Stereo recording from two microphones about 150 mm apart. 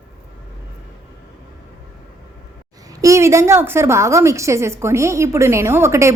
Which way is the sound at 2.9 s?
20° right (ahead or behind).